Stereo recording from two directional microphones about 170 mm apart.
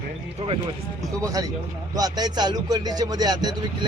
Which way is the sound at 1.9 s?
20° right (ahead or behind).